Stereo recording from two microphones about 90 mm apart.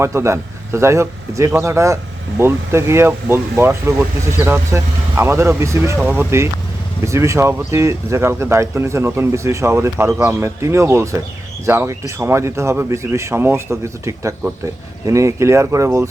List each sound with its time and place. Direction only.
0.0 s speech: 30° right (ahead or behind)
6.0 s speech: 20° right (ahead or behind)